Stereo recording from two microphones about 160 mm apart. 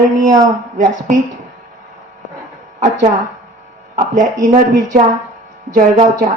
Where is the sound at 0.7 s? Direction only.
50° right (ahead or behind).